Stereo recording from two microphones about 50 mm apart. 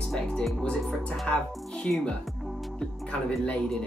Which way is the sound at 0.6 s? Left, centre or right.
Centre.